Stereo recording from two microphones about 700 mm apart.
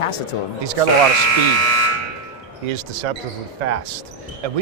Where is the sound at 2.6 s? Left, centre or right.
Right.